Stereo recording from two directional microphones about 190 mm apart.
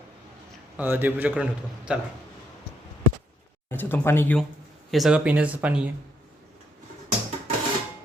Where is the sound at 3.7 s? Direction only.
10° left (ahead or behind).